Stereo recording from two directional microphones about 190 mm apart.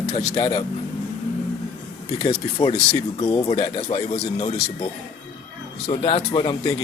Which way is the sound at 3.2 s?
20° left (ahead or behind).